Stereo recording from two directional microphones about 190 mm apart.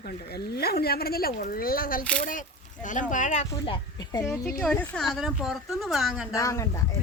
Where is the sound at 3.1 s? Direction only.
40° left (ahead or behind).